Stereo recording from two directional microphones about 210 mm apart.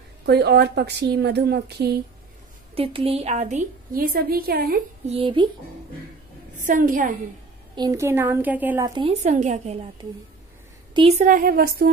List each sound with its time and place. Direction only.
0.3 s a woman's voice: 50° right (ahead or behind)
2.7 s a woman's voice: 25° right (ahead or behind); by 4.8 s 45° right (ahead or behind)
5.0 s a woman's voice: 25° right (ahead or behind)
6.6 s a woman's voice: 40° right (ahead or behind)
7.7 s a woman's voice: 15° right (ahead or behind); by 11.9 s 45° right (ahead or behind)